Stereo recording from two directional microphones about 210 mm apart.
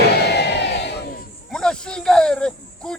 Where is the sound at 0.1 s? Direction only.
50° left (ahead or behind).